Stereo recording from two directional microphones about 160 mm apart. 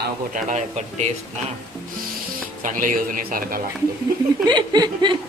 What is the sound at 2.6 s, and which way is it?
Speech, 55° right (ahead or behind).